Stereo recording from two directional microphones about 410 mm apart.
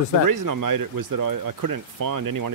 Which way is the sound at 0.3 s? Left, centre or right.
Right.